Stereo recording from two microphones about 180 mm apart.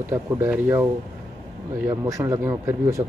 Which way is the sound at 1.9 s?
15° right (ahead or behind).